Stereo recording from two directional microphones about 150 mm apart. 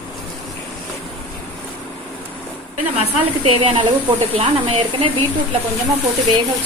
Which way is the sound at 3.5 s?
40° right (ahead or behind).